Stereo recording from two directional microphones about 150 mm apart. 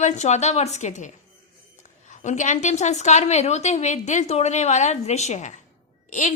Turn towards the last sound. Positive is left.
turn(degrees=55)  # may be behind; listen again after turning